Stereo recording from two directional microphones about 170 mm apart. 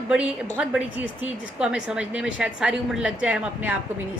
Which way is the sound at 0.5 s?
5° right (ahead or behind).